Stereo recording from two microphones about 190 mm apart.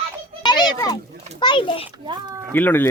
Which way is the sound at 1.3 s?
25° left (ahead or behind).